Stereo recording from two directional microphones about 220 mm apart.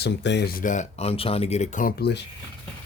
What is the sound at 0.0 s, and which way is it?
Speech, 50° left (ahead or behind).